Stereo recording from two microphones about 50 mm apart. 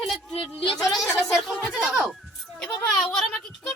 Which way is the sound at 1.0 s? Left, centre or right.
Centre.